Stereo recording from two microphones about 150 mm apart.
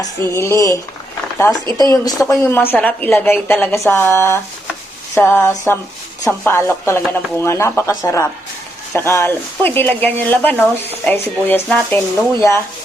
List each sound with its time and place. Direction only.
0.0 s speech: 20° left (ahead or behind)
1.8 s a woman's voice: 25° left (ahead or behind)